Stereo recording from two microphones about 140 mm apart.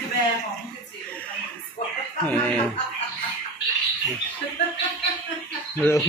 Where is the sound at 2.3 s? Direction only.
10° left (ahead or behind).